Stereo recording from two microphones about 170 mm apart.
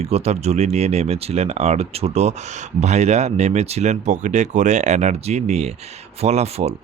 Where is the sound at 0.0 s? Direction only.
40° right (ahead or behind).